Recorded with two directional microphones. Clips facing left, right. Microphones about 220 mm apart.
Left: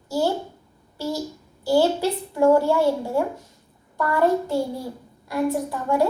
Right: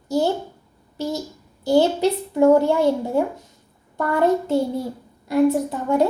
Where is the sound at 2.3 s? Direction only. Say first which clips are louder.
Right 2 dB; 20° right (ahead or behind).